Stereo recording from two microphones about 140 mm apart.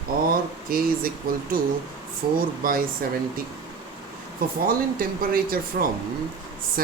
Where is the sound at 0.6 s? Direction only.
90° right.